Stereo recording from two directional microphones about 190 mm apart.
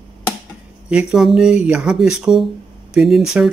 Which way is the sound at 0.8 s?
5° right (ahead or behind).